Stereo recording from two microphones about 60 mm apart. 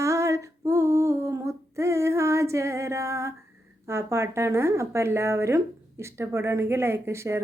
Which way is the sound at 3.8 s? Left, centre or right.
Right.